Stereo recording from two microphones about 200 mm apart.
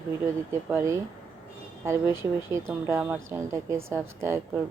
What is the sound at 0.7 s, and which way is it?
Speech, 15° right (ahead or behind).